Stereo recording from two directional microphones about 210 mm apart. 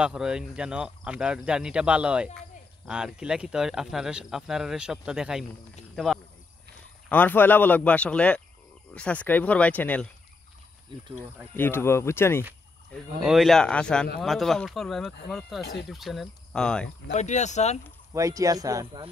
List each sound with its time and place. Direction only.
0.0 s speech: 5° right (ahead or behind)
7.1 s speech: 10° left (ahead or behind)
11.5 s speech: 10° left (ahead or behind)
12.9 s speech: centre (ahead or behind)
15.6 s speech: 55° left (ahead or behind)
15.9 s speech: centre (ahead or behind)
17.1 s speech: 35° left (ahead or behind)
18.1 s speech: 15° right (ahead or behind)